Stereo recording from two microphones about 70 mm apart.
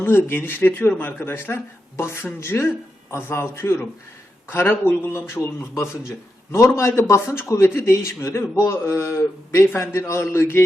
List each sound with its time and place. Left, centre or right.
0.0 s a man's voice: left